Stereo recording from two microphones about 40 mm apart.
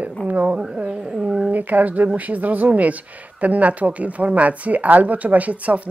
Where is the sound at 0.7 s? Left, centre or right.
Right.